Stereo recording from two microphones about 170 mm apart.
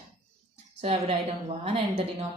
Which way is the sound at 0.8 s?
35° right (ahead or behind).